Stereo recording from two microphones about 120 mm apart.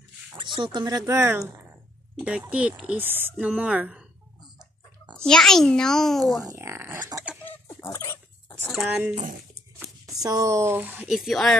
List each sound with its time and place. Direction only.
0.4 s speech: 45° right (ahead or behind); by 1.4 s 20° right (ahead or behind)
2.5 s a woman's voice: 10° right (ahead or behind)
5.2 s a child's voice: 5° left (ahead or behind)
6.4 s speech: 20° right (ahead or behind)
7.4 s dog: 25° left (ahead or behind)
8.6 s speech: 5° right (ahead or behind)
9.1 s speech: 90° right
9.8 s speech: 30° right (ahead or behind)
11.1 s a child's voice: centre (ahead or behind)